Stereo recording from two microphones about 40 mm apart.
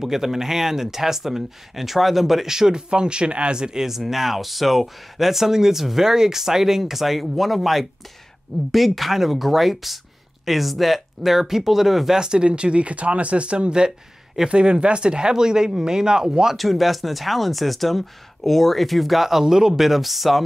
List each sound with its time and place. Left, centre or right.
0.0 s speech: centre
12.2 s speech: right
16.5 s speech: centre